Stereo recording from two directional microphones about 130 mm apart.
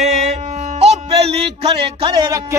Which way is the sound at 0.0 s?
60° right (ahead or behind).